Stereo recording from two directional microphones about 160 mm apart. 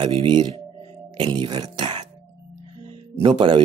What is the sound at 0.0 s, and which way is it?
Speech, 30° right (ahead or behind).